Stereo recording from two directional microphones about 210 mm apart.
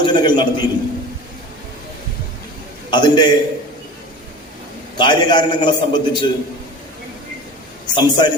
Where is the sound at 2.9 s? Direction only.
20° left (ahead or behind).